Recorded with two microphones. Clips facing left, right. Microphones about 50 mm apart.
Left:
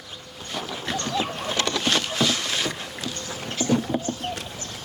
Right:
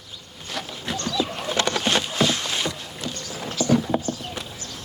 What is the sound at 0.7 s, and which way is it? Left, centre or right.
Dog, left.